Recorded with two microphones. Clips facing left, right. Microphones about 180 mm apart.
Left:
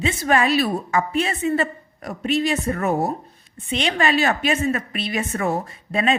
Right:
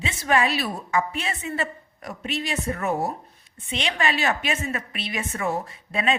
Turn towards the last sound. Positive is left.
turn(degrees=40)  # may be behind; listen again after turning